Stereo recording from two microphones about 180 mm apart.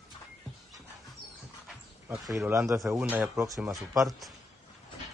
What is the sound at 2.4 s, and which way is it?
Speech, 15° right (ahead or behind).